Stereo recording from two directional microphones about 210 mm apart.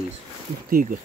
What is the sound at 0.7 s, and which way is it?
Speech, 40° right (ahead or behind).